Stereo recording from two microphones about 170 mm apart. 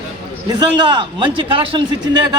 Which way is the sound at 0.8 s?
25° right (ahead or behind).